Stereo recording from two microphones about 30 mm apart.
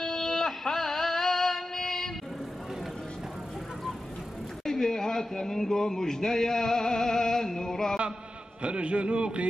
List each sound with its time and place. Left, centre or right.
0.0 s music: centre
4.6 s a sound: centre
8.6 s a man's voice: right